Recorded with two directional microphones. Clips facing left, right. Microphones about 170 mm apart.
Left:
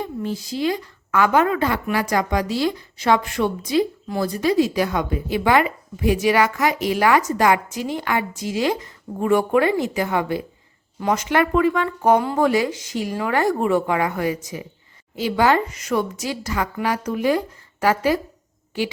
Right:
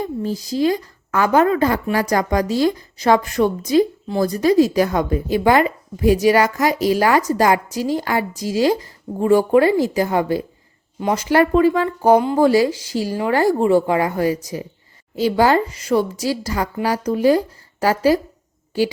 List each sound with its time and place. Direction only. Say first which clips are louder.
0.0 s speech: right 3 dB; 40° right (ahead or behind)
12.2 s speech: right 4 dB; 20° right (ahead or behind)
12.5 s speech: right 5 dB; 35° right (ahead or behind)